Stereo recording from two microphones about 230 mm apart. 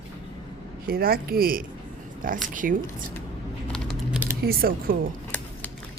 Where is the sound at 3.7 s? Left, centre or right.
Centre.